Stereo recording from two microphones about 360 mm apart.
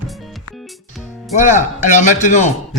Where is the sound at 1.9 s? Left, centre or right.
Centre.